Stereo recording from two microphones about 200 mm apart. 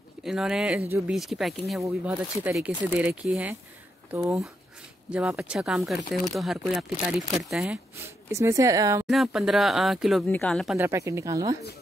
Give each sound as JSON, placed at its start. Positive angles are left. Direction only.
{"t": 0.2, "sound": "speech", "side_deg": 0}
{"t": 8.3, "sound": "speech", "side_deg": -15}
{"t": 9.0, "sound": "speech", "side_deg": 0}
{"t": 10.8, "sound": "speech", "side_deg": -15}